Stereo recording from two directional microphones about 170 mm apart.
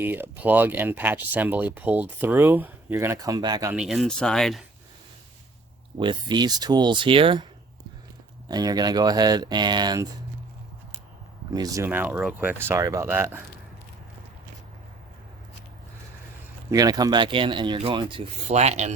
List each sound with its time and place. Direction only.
0.0 s speech: 10° right (ahead or behind)
3.7 s speech: 5° right (ahead or behind)
6.0 s speech: 25° right (ahead or behind)
8.4 s speech: 25° right (ahead or behind)
11.5 s speech: 20° right (ahead or behind)
16.7 s speech: 20° right (ahead or behind)
18.4 s speech: 40° right (ahead or behind)